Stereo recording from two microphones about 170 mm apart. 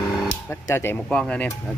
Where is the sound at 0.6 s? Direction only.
15° left (ahead or behind).